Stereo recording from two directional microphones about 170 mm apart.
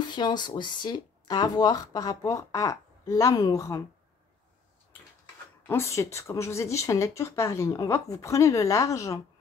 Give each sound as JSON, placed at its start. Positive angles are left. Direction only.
{"t": 0.1, "sound": "speech", "side_deg": 25}
{"t": 5.7, "sound": "speech", "side_deg": 15}